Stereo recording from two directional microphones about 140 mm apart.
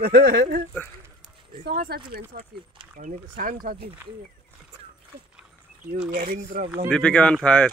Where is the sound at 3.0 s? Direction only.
70° right (ahead or behind).